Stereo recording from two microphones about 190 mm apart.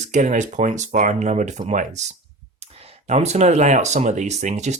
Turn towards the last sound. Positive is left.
turn(degrees=-35)  # may be behind; listen again after turning